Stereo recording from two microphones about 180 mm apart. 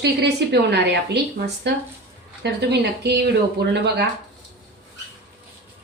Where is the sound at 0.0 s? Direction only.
70° right (ahead or behind).